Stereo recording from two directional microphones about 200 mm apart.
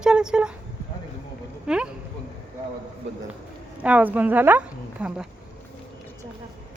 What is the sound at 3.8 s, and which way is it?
A woman's voice, 5° right (ahead or behind).